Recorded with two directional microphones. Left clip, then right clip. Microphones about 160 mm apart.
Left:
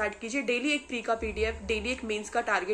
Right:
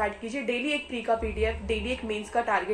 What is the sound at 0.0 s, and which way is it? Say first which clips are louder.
A woman's voice: right 1 dB; 20° left (ahead or behind).